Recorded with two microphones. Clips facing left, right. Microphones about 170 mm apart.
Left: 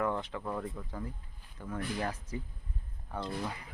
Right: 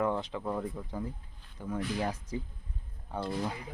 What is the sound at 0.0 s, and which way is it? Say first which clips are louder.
Speech: right 2 dB; 15° right (ahead or behind).